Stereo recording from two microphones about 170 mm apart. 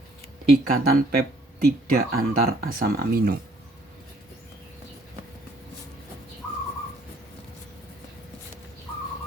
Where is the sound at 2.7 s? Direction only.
60° right (ahead or behind).